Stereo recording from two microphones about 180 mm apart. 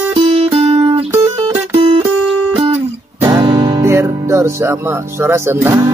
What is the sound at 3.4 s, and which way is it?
Speech, 25° right (ahead or behind).